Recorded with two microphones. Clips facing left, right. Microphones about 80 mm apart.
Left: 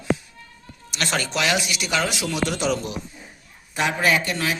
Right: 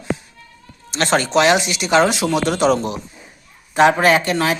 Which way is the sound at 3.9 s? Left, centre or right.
Right.